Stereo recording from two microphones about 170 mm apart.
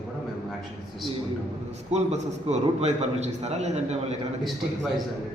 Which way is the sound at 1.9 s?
40° right (ahead or behind).